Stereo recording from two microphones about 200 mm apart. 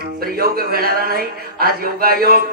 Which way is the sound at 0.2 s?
50° right (ahead or behind).